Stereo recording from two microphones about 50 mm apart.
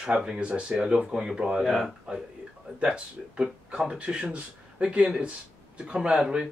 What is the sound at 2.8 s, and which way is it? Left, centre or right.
Speech, right.